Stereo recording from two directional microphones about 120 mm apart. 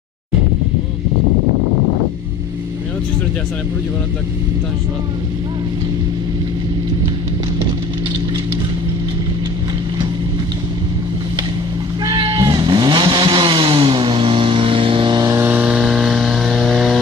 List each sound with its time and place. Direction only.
12.4 s vehicle: 40° right (ahead or behind)
15.3 s vehicle: 15° right (ahead or behind)